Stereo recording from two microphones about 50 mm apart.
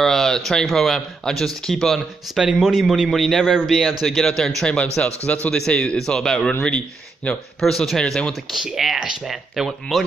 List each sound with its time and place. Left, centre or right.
0.0 s a man's voice: centre
2.4 s a man's voice: centre
4.6 s a man's voice: left
5.9 s a man's voice: centre
7.6 s a man's voice: centre